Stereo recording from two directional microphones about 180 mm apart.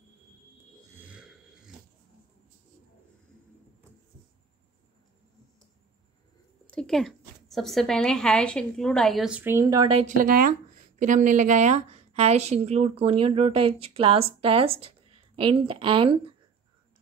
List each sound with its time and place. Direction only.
0.8 s a sound: 10° right (ahead or behind)
6.7 s a woman's voice: 5° left (ahead or behind); by 9.8 s 20° right (ahead or behind)
9.8 s speech: 35° right (ahead or behind)
10.1 s speech: 50° right (ahead or behind); by 16.3 s 30° right (ahead or behind)